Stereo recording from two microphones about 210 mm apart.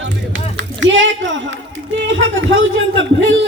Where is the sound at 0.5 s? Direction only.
60° right (ahead or behind).